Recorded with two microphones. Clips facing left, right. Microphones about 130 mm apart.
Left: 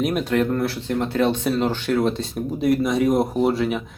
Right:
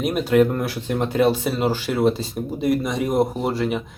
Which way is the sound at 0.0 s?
Centre (ahead or behind).